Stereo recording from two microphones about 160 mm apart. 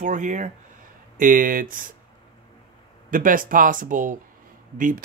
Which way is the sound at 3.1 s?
60° right (ahead or behind).